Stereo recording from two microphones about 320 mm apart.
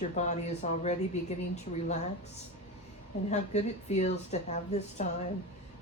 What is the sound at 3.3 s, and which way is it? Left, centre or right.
Speech, left.